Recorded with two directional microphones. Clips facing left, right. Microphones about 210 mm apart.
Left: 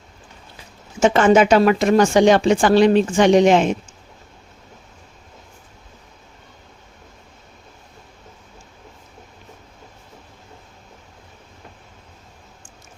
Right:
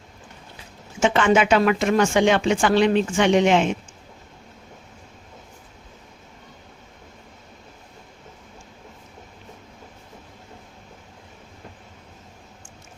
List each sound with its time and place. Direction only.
0.9 s speech: 40° left (ahead or behind)